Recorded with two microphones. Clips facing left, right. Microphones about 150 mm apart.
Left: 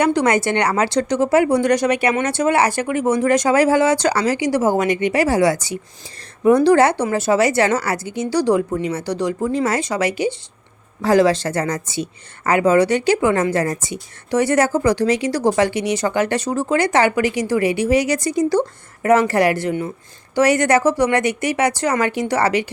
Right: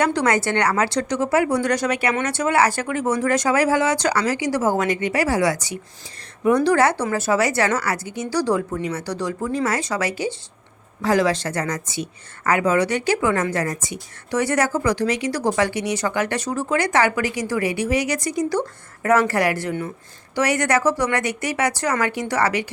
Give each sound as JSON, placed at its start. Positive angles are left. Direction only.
{"t": 0.0, "sound": "speech", "side_deg": 15}
{"t": 11.0, "sound": "speech", "side_deg": 30}